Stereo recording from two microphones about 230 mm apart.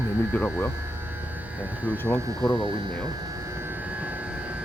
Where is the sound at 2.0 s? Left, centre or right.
Centre.